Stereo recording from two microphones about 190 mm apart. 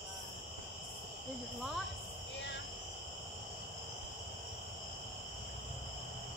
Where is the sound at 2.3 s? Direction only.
70° left (ahead or behind).